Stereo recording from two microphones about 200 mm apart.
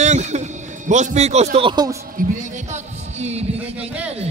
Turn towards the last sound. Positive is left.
turn(degrees=-30)  # may be behind; listen again after turning